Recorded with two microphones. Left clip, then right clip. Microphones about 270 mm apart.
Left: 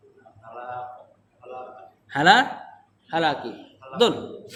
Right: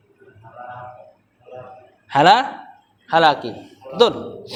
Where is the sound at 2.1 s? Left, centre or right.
Centre.